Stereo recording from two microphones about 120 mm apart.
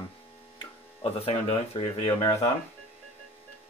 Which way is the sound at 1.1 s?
60° left (ahead or behind).